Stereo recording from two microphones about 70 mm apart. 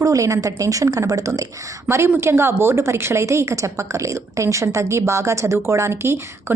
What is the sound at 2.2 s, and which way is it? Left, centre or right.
A woman's voice, right.